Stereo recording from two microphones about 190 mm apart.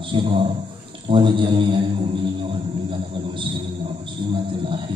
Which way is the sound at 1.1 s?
25° right (ahead or behind).